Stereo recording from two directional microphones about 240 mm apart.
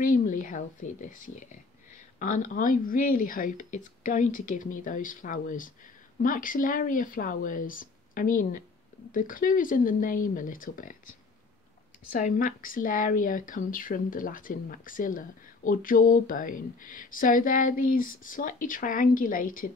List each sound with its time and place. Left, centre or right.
0.0 s speech: left
12.1 s speech: left